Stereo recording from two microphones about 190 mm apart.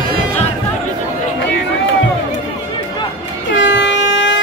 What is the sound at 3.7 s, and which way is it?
Air horn, 70° left (ahead or behind).